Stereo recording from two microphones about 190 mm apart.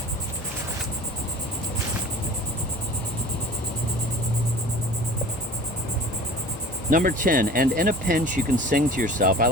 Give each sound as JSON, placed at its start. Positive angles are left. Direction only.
{"t": 6.9, "sound": "speech", "side_deg": -45}